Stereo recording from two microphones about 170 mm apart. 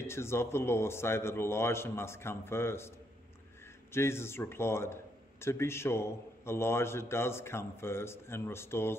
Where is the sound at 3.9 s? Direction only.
15° left (ahead or behind).